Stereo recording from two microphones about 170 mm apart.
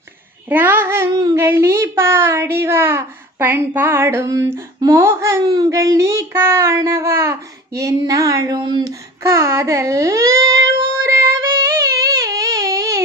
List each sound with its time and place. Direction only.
0.5 s a child's voice: 10° right (ahead or behind)
9.3 s child singing: 15° right (ahead or behind)